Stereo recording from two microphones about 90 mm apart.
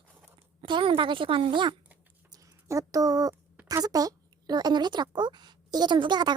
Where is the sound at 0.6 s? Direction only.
70° right (ahead or behind).